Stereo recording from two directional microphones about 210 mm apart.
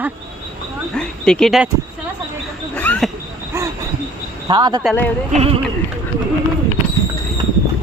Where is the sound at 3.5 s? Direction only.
15° right (ahead or behind).